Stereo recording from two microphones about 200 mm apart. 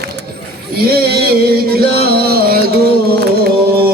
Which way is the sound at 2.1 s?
50° right (ahead or behind).